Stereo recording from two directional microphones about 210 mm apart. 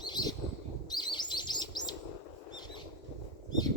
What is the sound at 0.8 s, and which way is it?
Chirp, 20° left (ahead or behind).